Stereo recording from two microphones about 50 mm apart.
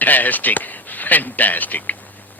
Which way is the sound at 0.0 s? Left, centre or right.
Left.